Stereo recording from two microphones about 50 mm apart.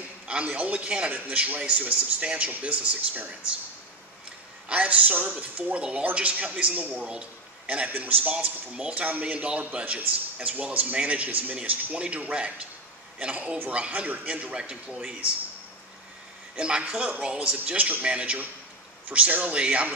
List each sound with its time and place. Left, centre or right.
0.5 s a man's voice: right
1.1 s a man's voice: right
4.6 s a man's voice: right
16.5 s a man's voice: centre
17.7 s a man's voice: right